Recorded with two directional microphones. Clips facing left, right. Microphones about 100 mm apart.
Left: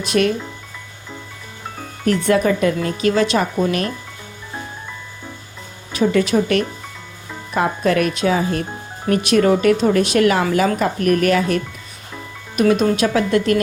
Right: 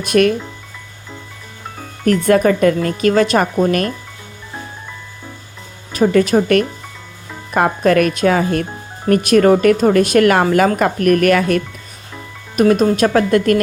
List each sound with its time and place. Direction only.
0.0 s speech: 50° right (ahead or behind)
2.0 s speech: 50° right (ahead or behind)
5.9 s speech: 45° right (ahead or behind)
9.0 s speech: 50° right (ahead or behind)
12.5 s speech: 40° right (ahead or behind)